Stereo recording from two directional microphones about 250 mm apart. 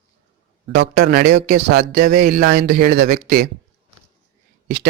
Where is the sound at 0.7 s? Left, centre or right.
Right.